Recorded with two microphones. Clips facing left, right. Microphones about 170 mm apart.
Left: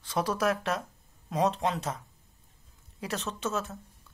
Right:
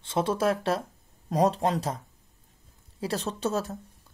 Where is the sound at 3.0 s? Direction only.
35° right (ahead or behind).